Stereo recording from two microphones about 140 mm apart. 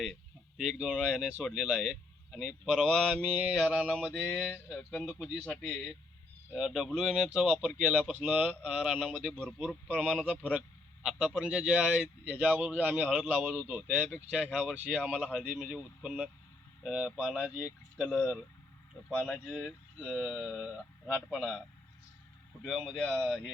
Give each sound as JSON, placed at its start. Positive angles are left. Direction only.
{"t": 0.0, "sound": "speech", "side_deg": 0}
{"t": 4.8, "sound": "speech", "side_deg": 10}
{"t": 5.0, "sound": "speech", "side_deg": -5}
{"t": 5.5, "sound": "speech", "side_deg": 10}
{"t": 6.5, "sound": "a man's voice", "side_deg": -5}
{"t": 18.0, "sound": "speech", "side_deg": 0}
{"t": 19.0, "sound": "speech", "side_deg": 10}
{"t": 22.6, "sound": "speech", "side_deg": 0}